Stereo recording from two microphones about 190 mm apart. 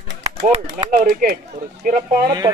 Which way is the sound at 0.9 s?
45° right (ahead or behind).